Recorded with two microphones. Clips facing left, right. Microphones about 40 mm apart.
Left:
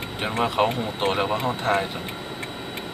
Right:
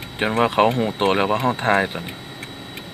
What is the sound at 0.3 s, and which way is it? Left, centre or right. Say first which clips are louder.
Speech: right 5 dB; right.